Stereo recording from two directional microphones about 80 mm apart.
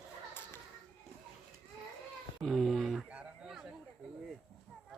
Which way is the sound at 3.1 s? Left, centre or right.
Centre.